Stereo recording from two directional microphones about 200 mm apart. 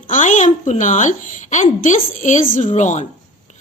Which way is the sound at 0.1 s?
40° left (ahead or behind).